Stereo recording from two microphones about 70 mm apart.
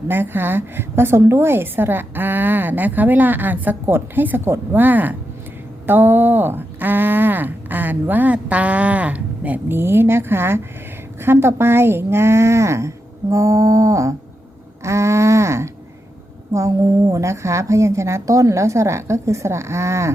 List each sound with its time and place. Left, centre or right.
0.1 s a woman's voice: right
9.7 s a woman's voice: right